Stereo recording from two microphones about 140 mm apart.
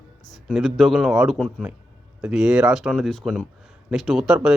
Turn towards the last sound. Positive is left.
turn(degrees=-5)  # may be behind; listen again after turning